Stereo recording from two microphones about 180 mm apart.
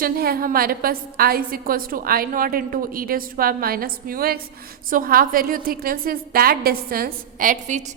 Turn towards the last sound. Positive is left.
turn(degrees=-40)  # may be behind; listen again after turning